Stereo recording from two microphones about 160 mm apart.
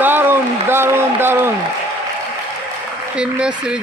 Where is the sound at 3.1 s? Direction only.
5° right (ahead or behind).